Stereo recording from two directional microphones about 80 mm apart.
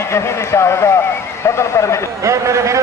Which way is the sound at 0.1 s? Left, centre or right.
Left.